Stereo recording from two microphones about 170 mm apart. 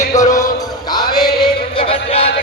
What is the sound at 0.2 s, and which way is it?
Music, 20° left (ahead or behind).